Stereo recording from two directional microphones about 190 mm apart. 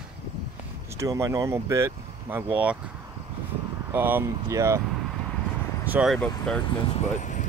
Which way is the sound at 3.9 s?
10° right (ahead or behind).